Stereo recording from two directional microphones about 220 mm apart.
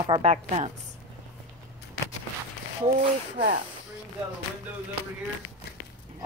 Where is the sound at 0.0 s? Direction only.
25° right (ahead or behind).